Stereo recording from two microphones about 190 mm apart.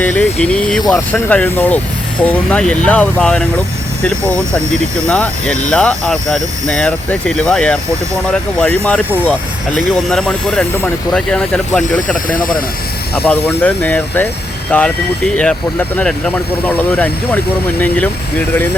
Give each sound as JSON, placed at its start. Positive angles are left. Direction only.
{"t": 0.0, "sound": "speech", "side_deg": 10}
{"t": 12.4, "sound": "speech", "side_deg": 45}
{"t": 13.2, "sound": "speech", "side_deg": 10}